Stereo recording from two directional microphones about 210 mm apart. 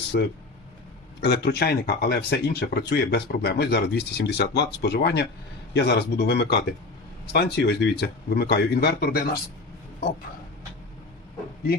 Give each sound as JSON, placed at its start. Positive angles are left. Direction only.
{"t": 0.1, "sound": "speech", "side_deg": 50}